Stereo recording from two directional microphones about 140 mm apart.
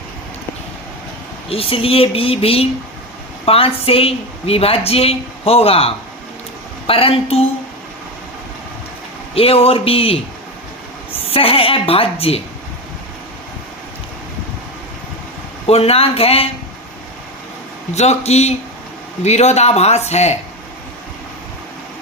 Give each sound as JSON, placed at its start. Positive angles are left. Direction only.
{"t": 1.5, "sound": "a woman's voice", "side_deg": 40}
{"t": 9.3, "sound": "a woman's voice", "side_deg": 45}
{"t": 11.3, "sound": "a woman's voice", "side_deg": 40}
{"t": 15.6, "sound": "a woman's voice", "side_deg": 45}
{"t": 17.9, "sound": "a woman's voice", "side_deg": 50}